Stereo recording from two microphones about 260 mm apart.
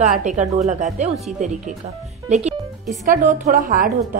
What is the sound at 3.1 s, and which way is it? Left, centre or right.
Speech, right.